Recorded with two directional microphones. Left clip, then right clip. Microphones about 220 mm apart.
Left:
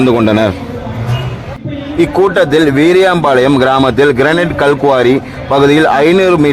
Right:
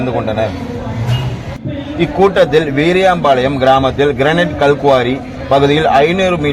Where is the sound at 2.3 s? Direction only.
25° left (ahead or behind).